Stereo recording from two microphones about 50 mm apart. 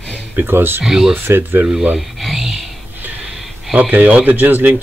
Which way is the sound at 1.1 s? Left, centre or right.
Right.